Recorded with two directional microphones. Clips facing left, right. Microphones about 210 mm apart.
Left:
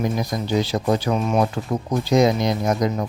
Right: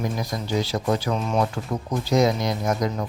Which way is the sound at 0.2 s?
20° left (ahead or behind).